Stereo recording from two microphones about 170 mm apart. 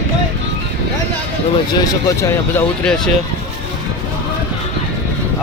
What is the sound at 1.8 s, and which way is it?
Speech, 15° left (ahead or behind).